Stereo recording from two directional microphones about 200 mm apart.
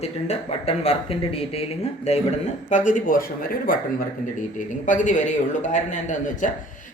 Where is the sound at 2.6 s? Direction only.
40° left (ahead or behind).